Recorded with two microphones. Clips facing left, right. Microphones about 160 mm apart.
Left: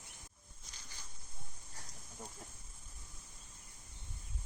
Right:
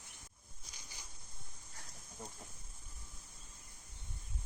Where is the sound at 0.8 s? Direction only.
15° right (ahead or behind).